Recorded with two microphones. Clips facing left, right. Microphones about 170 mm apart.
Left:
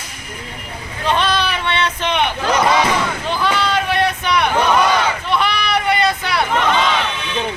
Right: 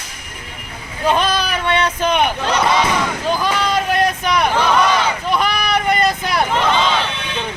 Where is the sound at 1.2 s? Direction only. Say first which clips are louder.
Even; 45° right (ahead or behind).